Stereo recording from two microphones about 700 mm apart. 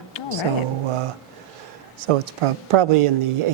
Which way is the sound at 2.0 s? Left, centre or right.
Right.